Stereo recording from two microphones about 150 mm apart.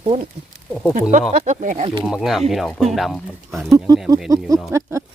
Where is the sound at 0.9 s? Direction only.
60° right (ahead or behind).